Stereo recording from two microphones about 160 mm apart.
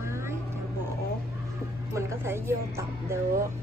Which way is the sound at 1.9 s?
15° right (ahead or behind).